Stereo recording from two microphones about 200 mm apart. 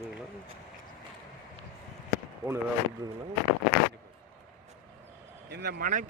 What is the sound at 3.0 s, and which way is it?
Speech, 20° right (ahead or behind).